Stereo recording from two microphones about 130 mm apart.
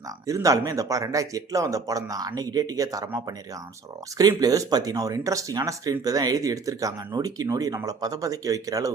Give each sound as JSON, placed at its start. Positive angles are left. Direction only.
{"t": 0.3, "sound": "speech", "side_deg": -25}